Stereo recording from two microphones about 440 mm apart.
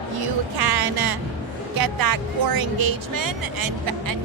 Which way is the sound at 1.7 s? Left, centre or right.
Right.